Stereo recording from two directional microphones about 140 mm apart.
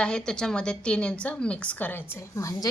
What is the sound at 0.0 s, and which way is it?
A woman's voice, 5° left (ahead or behind).